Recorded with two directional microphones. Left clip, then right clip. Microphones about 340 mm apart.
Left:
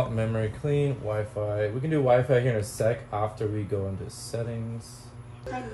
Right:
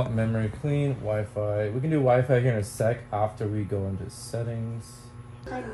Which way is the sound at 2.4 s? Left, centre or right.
Centre.